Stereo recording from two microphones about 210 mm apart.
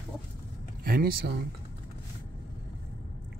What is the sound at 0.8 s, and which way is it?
Speech, 45° right (ahead or behind).